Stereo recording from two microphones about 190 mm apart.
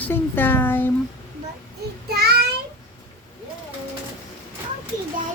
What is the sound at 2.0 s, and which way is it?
Child singing, 55° right (ahead or behind).